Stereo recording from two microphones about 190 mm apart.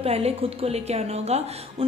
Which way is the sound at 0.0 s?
30° right (ahead or behind).